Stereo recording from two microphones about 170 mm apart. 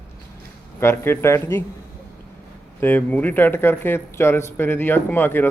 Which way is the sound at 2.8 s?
10° left (ahead or behind).